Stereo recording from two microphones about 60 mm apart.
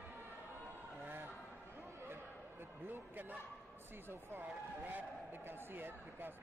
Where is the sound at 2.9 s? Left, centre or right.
Right.